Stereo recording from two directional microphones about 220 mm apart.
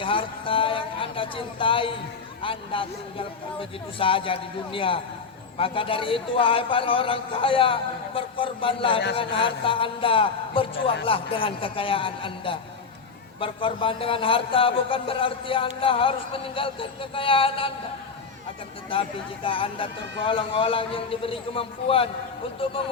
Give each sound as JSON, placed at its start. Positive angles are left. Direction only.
{"t": 0.0, "sound": "a sound", "side_deg": 25}
{"t": 2.4, "sound": "speech", "side_deg": 25}
{"t": 18.9, "sound": "speech", "side_deg": 25}